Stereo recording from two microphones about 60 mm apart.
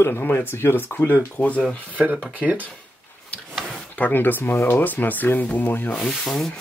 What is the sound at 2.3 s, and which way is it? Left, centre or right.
Speech, right.